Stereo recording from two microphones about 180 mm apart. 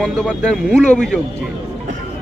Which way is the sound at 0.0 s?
5° left (ahead or behind).